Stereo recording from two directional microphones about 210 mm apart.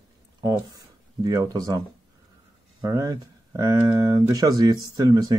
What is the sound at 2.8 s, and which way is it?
Speech, 15° right (ahead or behind).